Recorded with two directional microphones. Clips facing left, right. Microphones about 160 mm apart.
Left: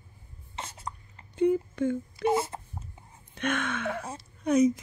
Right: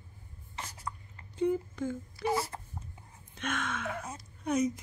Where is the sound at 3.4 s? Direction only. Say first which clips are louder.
Left 5 dB; 65° left (ahead or behind).